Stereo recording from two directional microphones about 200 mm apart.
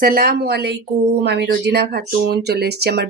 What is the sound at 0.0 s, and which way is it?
Speech, 45° right (ahead or behind).